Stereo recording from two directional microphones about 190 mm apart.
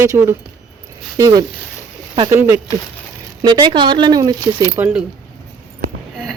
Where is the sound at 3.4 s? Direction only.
25° right (ahead or behind).